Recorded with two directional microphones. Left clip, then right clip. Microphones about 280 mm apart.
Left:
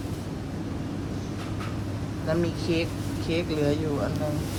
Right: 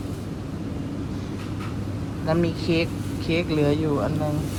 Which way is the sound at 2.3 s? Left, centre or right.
Centre.